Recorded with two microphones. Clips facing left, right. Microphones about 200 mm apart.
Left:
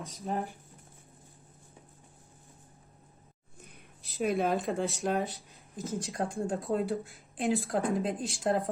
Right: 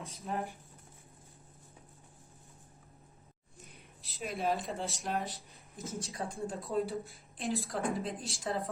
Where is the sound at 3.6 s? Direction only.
55° left (ahead or behind).